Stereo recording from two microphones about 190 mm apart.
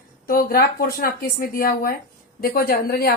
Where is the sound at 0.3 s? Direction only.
50° left (ahead or behind).